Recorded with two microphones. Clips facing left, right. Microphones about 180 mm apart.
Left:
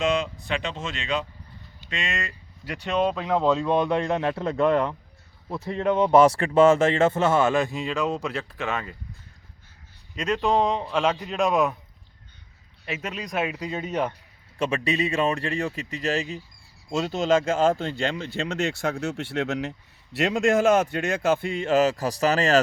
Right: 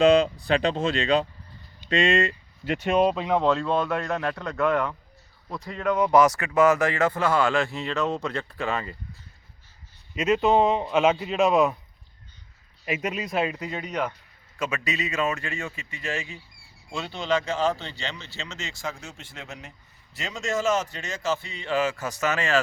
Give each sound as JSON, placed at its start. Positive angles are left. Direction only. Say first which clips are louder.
{"t": 0.0, "sound": "speech", "louder": "right 7 dB", "side_deg": -35}
{"t": 3.0, "sound": "a man's voice", "louder": "left 1 dB", "side_deg": -5}
{"t": 3.6, "sound": "speech", "louder": "left 3 dB", "side_deg": 15}
{"t": 10.2, "sound": "a man's voice", "louder": "right 2 dB", "side_deg": -5}
{"t": 12.8, "sound": "speech", "louder": "right 3 dB", "side_deg": -10}
{"t": 13.5, "sound": "speech", "louder": "left 2 dB", "side_deg": 15}
{"t": 14.6, "sound": "speech", "louder": "left 5 dB", "side_deg": 30}